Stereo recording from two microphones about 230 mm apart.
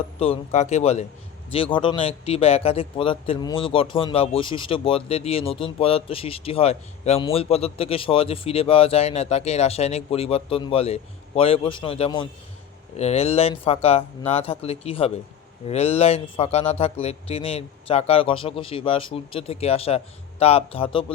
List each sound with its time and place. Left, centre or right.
0.2 s speech: left